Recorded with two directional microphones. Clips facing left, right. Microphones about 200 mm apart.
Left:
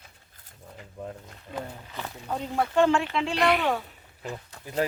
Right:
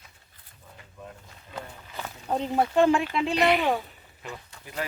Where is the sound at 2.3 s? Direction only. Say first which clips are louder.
Right 2 dB; 20° right (ahead or behind).